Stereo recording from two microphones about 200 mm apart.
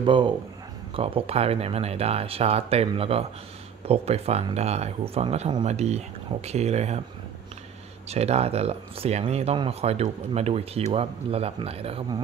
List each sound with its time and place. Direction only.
0.0 s speech: 25° right (ahead or behind)
8.1 s speech: 30° right (ahead or behind)